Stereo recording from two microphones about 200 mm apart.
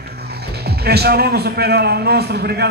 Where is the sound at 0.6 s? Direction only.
55° right (ahead or behind).